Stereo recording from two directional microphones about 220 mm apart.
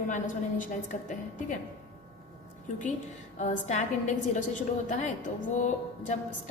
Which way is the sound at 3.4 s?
30° left (ahead or behind).